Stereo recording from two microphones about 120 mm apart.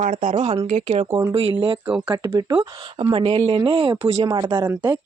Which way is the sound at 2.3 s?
45° right (ahead or behind).